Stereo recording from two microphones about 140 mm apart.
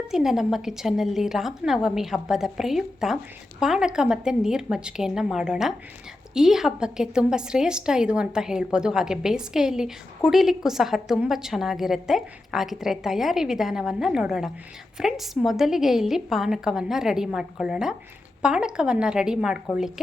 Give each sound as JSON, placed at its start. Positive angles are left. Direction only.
{"t": 0.1, "sound": "a woman's voice", "side_deg": -5}